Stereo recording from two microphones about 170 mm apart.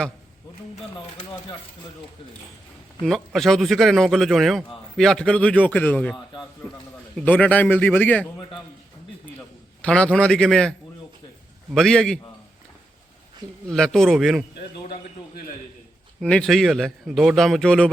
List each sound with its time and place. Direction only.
0.9 s speech: 30° left (ahead or behind)
3.0 s a man's voice: centre (ahead or behind)
7.2 s a man's voice: 5° left (ahead or behind)
9.8 s a man's voice: 5° left (ahead or behind)
13.7 s a man's voice: 5° left (ahead or behind)
16.2 s a man's voice: 5° left (ahead or behind)